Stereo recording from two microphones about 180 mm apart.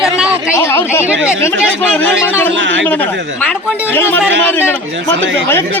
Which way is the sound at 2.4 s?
90° right.